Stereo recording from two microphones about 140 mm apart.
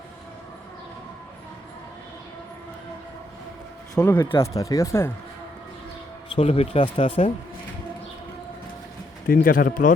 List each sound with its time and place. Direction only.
4.0 s speech: 15° left (ahead or behind)
6.3 s speech: 45° left (ahead or behind)
9.2 s speech: 90° left